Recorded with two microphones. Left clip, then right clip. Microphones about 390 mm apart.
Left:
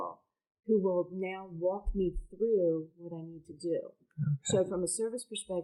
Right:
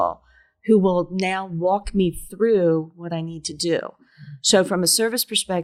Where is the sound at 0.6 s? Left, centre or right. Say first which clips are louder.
Right 11 dB; right.